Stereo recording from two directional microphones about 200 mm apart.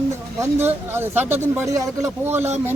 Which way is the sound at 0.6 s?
10° right (ahead or behind).